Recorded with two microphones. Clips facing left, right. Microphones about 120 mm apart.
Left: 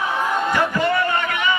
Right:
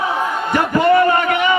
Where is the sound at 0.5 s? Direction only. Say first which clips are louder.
Right 8 dB; 55° right (ahead or behind).